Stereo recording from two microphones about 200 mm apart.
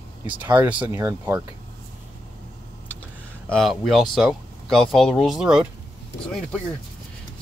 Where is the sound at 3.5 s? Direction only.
Centre (ahead or behind).